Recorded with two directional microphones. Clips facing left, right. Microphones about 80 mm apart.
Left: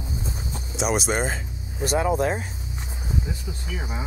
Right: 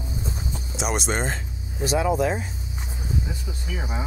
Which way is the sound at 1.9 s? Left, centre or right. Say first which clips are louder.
Even; left.